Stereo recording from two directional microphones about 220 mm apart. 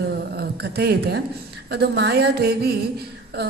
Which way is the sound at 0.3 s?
45° right (ahead or behind).